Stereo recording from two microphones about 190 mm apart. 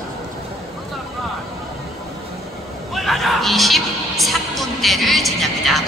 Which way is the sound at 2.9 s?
Centre (ahead or behind).